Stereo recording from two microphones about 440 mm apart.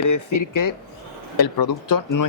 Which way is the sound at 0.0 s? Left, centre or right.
Left.